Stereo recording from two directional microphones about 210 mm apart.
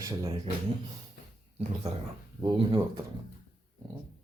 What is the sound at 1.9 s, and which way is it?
Speech, 30° right (ahead or behind).